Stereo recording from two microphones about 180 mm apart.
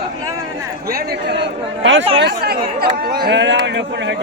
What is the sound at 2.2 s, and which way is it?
Speech, 60° right (ahead or behind).